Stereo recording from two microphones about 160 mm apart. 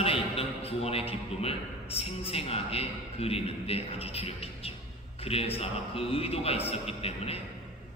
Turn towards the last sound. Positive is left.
turn(degrees=40)  # may be behind; listen again after turning